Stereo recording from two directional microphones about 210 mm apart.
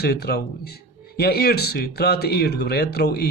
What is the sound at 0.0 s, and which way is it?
Speech, 50° left (ahead or behind).